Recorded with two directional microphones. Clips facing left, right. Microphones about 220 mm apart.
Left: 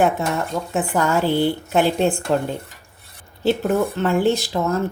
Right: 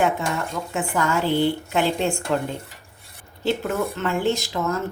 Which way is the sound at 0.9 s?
40° left (ahead or behind).